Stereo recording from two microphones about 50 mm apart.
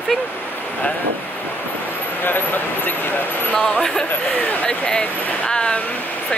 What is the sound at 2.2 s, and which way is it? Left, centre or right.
Speech, left.